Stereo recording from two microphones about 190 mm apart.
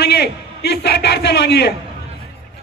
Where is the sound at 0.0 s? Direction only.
55° left (ahead or behind).